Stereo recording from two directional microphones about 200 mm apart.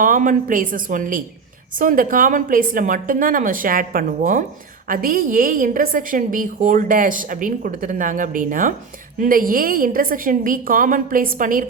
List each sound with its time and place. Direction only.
0.0 s a woman's voice: 40° right (ahead or behind)